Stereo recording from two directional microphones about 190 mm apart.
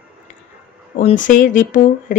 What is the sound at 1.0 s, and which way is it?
Speech, 40° left (ahead or behind).